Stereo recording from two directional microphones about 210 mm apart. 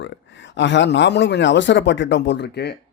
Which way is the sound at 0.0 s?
60° left (ahead or behind).